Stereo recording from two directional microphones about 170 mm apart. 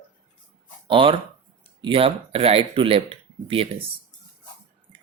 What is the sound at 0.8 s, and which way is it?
Speech, 30° right (ahead or behind).